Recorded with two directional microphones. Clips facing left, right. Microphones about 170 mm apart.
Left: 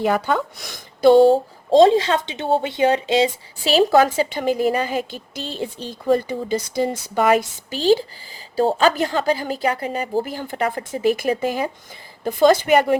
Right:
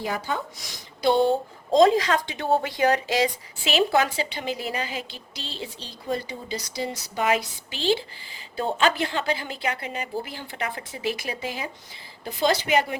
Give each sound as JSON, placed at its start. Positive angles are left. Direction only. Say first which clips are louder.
{"t": 0.6, "sound": "a woman's voice", "louder": "left 10 dB", "side_deg": 50}
{"t": 3.6, "sound": "a woman's voice", "louder": "left 7 dB", "side_deg": 40}